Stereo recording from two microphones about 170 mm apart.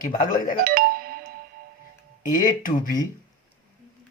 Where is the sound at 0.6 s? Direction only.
60° right (ahead or behind).